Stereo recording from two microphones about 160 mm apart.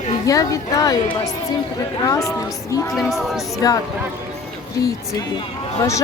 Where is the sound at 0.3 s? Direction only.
20° left (ahead or behind).